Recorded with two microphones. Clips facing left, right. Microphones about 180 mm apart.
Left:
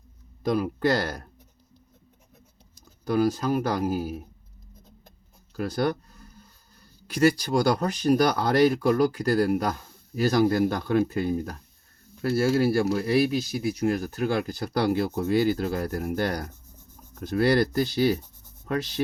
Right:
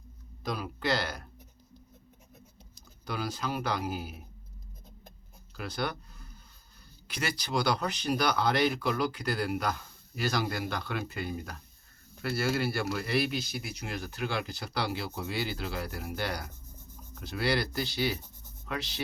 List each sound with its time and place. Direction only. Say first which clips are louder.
0.4 s speech: left 9 dB; 50° left (ahead or behind)
3.0 s speech: left 11 dB; 45° left (ahead or behind)
5.5 s speech: left 9 dB; 45° left (ahead or behind)